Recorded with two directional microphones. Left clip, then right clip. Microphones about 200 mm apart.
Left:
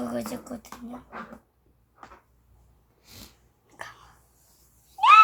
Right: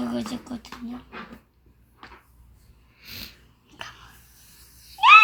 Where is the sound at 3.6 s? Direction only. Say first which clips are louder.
Right 2 dB; 20° left (ahead or behind).